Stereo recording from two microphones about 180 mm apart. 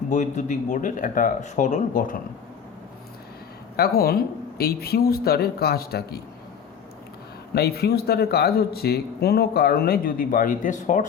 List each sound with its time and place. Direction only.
0.1 s speech: 40° left (ahead or behind)
3.8 s speech: 60° left (ahead or behind)
7.5 s speech: 60° left (ahead or behind); by 11.0 s 45° left (ahead or behind)